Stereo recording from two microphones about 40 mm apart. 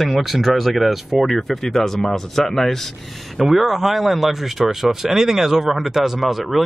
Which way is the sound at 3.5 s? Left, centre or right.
Centre.